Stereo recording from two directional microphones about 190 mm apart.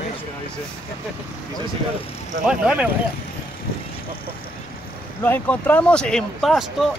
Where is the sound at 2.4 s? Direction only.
5° right (ahead or behind).